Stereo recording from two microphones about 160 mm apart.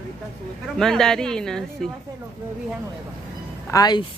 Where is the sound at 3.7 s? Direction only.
25° left (ahead or behind).